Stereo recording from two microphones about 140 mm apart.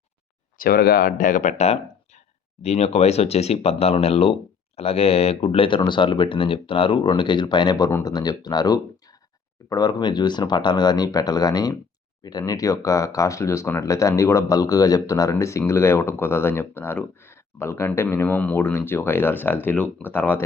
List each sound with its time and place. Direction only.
0.6 s speech: 90° left; by 20.4 s 15° left (ahead or behind)